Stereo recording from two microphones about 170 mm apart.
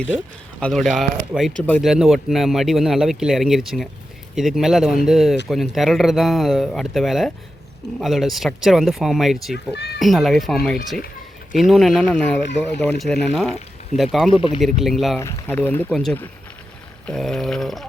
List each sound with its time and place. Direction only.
0.6 s speech: centre (ahead or behind)
9.7 s speech: 75° left (ahead or behind)
10.0 s speech: centre (ahead or behind)
14.3 s speech: 30° left (ahead or behind)
14.6 s speech: centre (ahead or behind)
15.2 s speech: 15° left (ahead or behind)